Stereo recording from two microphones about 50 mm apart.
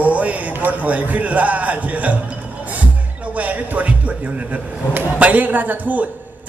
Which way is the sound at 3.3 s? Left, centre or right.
Right.